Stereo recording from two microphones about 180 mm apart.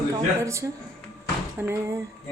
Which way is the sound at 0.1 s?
15° right (ahead or behind).